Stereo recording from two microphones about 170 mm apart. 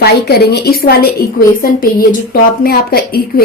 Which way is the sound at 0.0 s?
70° left (ahead or behind).